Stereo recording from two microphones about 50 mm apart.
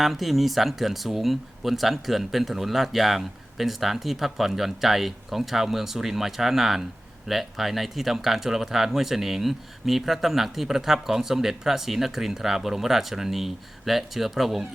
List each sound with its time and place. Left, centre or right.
0.0 s speech: centre